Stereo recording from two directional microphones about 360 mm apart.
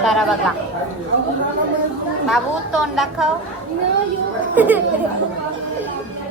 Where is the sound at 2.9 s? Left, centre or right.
Centre.